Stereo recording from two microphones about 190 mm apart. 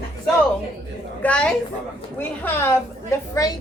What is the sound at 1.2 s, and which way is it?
A woman's voice, 5° left (ahead or behind).